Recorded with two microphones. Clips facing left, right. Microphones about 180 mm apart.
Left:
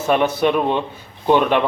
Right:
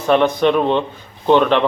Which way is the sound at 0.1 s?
10° left (ahead or behind).